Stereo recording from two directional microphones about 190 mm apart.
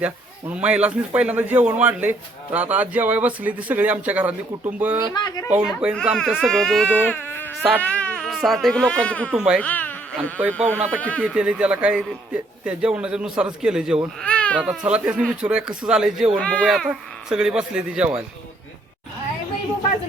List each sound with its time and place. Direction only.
0.0 s a man's voice: 5° right (ahead or behind)
5.1 s speech: 20° left (ahead or behind)
5.5 s speech: 5° right (ahead or behind)
9.3 s speech: 5° right (ahead or behind)
9.6 s speech: 10° left (ahead or behind)
10.4 s a man's voice: 10° right (ahead or behind)
10.9 s speech: 10° left (ahead or behind)
11.2 s speech: 5° right (ahead or behind)
14.2 s speech: 5° left (ahead or behind)
14.6 s speech: 5° right (ahead or behind)